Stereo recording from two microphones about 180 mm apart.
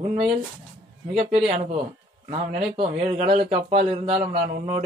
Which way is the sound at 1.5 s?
40° right (ahead or behind).